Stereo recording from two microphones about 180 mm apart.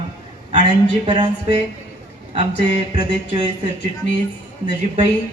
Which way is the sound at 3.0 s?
25° right (ahead or behind).